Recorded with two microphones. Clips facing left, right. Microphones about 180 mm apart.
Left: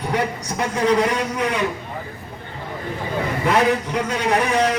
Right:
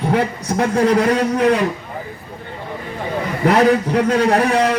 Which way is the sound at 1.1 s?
35° right (ahead or behind).